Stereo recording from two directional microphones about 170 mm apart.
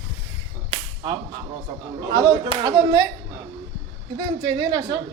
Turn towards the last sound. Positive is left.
turn(degrees=-25)  # may be behind; listen again after turning